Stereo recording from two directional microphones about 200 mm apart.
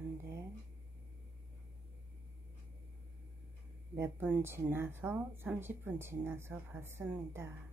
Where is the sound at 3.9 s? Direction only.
10° right (ahead or behind).